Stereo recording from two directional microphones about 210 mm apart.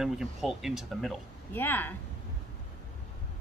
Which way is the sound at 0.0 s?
Centre (ahead or behind).